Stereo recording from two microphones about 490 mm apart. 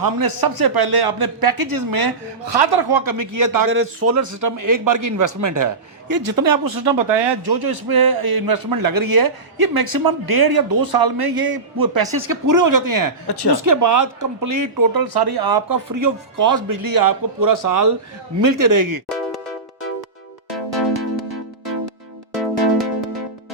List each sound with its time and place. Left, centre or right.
0.0 s a man's voice: right
3.7 s a man's voice: right
13.2 s speech: left
13.7 s speech: right
22.4 s music: centre